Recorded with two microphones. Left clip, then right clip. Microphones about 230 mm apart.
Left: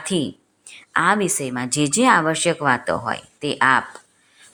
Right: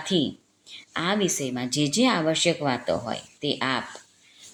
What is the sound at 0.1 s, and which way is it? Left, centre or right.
Speech, left.